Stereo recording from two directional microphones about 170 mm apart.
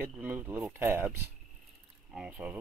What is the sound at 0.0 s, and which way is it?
Speech, 10° right (ahead or behind).